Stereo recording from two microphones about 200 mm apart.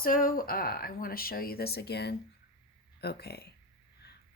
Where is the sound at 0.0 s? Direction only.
45° left (ahead or behind).